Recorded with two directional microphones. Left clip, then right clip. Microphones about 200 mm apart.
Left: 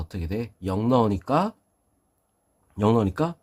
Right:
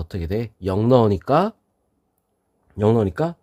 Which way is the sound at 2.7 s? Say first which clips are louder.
Right 3 dB; 25° right (ahead or behind).